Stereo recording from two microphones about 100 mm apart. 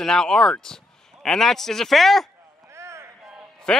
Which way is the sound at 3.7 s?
10° left (ahead or behind).